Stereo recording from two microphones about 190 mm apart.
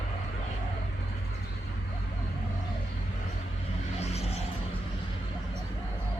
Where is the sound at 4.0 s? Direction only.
35° left (ahead or behind).